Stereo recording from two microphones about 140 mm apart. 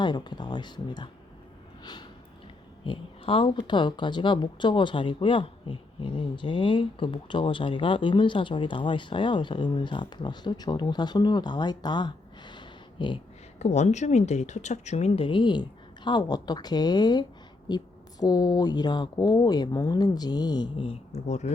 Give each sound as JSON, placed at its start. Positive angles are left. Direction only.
{"t": 0.0, "sound": "speech", "side_deg": 30}
{"t": 1.8, "sound": "a sound", "side_deg": 30}
{"t": 2.8, "sound": "speech", "side_deg": 40}
{"t": 13.6, "sound": "speech", "side_deg": 55}